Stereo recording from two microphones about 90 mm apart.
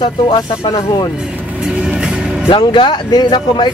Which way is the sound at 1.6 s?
10° right (ahead or behind).